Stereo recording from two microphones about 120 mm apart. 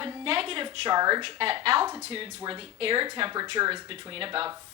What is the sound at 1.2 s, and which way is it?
Speech, 50° right (ahead or behind).